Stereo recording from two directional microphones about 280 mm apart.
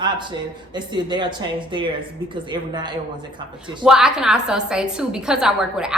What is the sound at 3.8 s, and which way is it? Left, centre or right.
A woman's voice, centre.